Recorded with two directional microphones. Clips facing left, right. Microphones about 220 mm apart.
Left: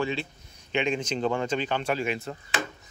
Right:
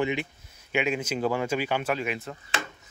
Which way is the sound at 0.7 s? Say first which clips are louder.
Even; 5° right (ahead or behind).